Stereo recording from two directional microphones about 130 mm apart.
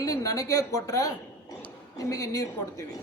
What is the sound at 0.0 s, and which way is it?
A man's voice, 25° left (ahead or behind).